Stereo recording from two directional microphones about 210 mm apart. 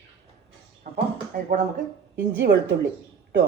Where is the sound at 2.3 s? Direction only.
55° right (ahead or behind).